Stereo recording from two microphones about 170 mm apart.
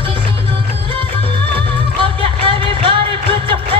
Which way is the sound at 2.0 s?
30° right (ahead or behind).